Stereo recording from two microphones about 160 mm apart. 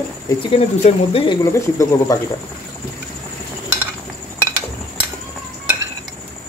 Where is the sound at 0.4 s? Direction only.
35° left (ahead or behind).